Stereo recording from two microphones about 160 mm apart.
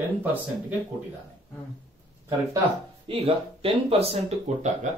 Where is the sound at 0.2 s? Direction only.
10° right (ahead or behind).